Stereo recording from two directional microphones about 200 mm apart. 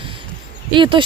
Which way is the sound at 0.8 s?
25° right (ahead or behind).